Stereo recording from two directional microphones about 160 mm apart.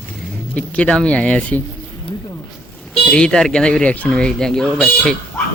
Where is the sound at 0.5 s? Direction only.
5° left (ahead or behind).